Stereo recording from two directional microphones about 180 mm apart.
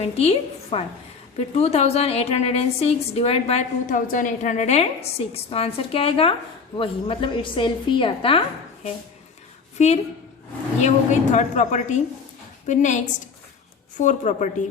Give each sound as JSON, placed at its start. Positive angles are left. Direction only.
{"t": 0.0, "sound": "a woman's voice", "side_deg": 35}
{"t": 3.8, "sound": "a woman's voice", "side_deg": 50}